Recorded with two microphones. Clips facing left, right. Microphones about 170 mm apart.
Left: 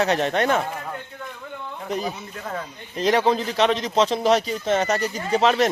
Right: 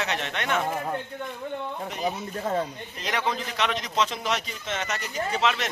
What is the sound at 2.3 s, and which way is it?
Speech, 30° right (ahead or behind).